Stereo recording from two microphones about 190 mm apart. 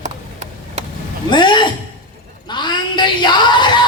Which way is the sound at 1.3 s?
25° left (ahead or behind).